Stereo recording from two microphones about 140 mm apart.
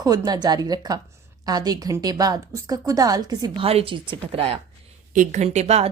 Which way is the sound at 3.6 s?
40° right (ahead or behind).